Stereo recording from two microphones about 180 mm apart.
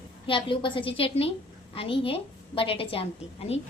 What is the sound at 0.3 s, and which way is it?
A woman's voice, 30° left (ahead or behind).